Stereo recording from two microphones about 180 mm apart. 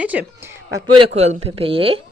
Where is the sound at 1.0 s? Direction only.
35° right (ahead or behind).